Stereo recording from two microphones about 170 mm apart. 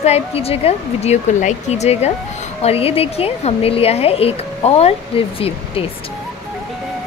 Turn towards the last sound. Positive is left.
turn(degrees=35)  # may be behind; listen again after turning